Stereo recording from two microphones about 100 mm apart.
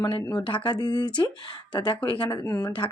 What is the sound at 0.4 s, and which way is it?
Speech, 55° left (ahead or behind).